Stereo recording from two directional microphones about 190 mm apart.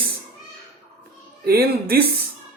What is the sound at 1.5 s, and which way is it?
Speech, 55° right (ahead or behind).